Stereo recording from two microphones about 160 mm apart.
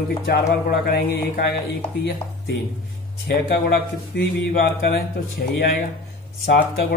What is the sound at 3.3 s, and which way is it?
Speech, 75° left (ahead or behind).